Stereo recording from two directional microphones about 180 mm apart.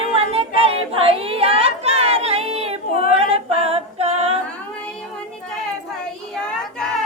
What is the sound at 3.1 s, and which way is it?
Singing, 35° right (ahead or behind).